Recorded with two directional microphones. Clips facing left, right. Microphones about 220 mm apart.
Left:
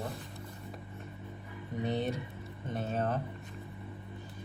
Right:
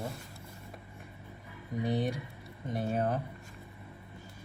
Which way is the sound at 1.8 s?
10° right (ahead or behind).